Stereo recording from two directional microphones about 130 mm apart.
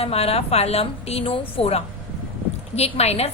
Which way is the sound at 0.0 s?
50° left (ahead or behind).